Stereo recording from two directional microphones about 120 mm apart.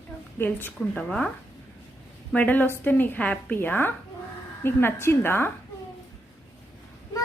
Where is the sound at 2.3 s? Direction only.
15° left (ahead or behind).